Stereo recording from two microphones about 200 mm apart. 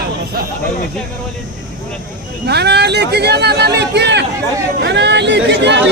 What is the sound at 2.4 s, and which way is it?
Speech, 55° right (ahead or behind).